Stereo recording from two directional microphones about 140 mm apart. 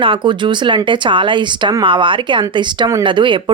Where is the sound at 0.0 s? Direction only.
35° right (ahead or behind).